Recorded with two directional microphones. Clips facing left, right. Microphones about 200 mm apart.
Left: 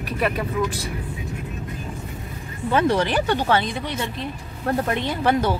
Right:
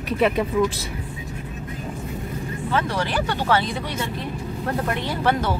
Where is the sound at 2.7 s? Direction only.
20° left (ahead or behind).